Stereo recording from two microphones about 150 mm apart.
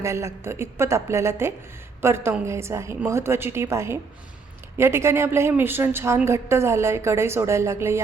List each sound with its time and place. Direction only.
0.0 s a woman's voice: 20° right (ahead or behind)